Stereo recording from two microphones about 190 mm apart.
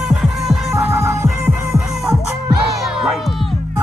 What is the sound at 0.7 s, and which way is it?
Music, 15° right (ahead or behind).